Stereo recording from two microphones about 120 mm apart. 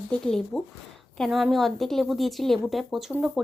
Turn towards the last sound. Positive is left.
turn(degrees=-5)  # may be behind; listen again after turning